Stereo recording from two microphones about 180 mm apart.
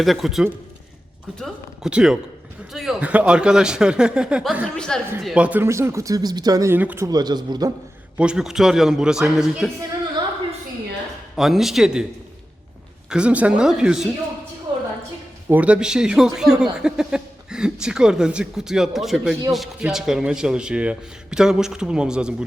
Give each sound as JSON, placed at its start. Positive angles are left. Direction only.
{"t": 0.0, "sound": "speech", "side_deg": 0}
{"t": 8.2, "sound": "speech", "side_deg": -5}
{"t": 11.3, "sound": "speech", "side_deg": 0}
{"t": 13.1, "sound": "speech", "side_deg": -5}
{"t": 15.4, "sound": "speech", "side_deg": -10}